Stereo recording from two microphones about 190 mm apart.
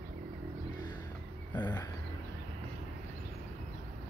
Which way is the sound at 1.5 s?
20° left (ahead or behind).